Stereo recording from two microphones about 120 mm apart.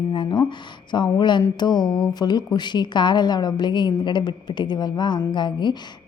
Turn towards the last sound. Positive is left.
turn(degrees=40)  # may be behind; listen again after turning